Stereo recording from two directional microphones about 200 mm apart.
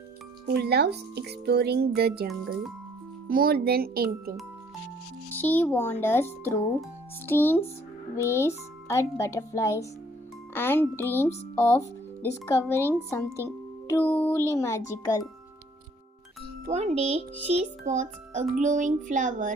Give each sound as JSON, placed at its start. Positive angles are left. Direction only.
{"t": 0.4, "sound": "speech", "side_deg": -55}
{"t": 5.4, "sound": "speech", "side_deg": 10}
{"t": 13.8, "sound": "speech", "side_deg": 10}
{"t": 16.7, "sound": "a child's voice", "side_deg": -30}